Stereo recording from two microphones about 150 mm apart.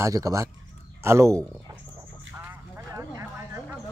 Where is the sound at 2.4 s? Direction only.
20° right (ahead or behind).